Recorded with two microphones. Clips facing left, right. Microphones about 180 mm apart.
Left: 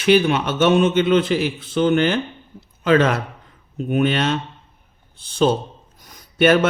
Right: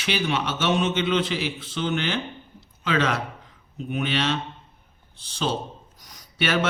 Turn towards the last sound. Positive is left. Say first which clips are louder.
# left 10 dB
turn(degrees=50)  # may be behind; listen again after turning